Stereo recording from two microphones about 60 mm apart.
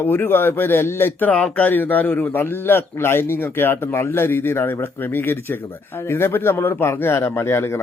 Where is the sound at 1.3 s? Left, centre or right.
Left.